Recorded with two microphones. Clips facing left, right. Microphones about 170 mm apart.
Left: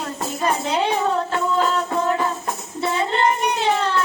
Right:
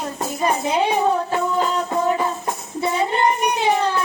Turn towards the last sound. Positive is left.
turn(degrees=-15)  # may be behind; listen again after turning